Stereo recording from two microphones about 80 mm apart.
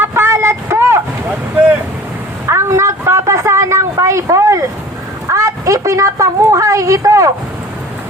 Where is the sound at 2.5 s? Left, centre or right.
Right.